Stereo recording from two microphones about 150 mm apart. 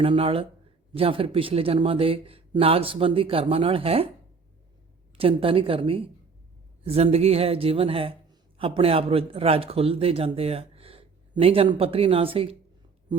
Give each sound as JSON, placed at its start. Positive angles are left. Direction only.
{"t": 0.0, "sound": "a man's voice", "side_deg": -40}
{"t": 5.1, "sound": "a man's voice", "side_deg": -40}